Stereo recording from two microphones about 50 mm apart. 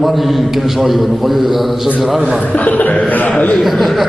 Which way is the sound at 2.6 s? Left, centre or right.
Left.